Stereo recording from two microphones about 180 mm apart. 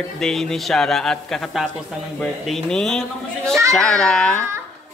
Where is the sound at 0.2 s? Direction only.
5° left (ahead or behind).